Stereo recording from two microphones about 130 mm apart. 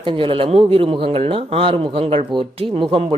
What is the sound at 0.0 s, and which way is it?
Speech, 40° right (ahead or behind).